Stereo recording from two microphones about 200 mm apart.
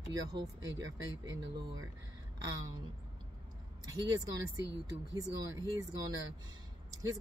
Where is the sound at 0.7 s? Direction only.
15° right (ahead or behind).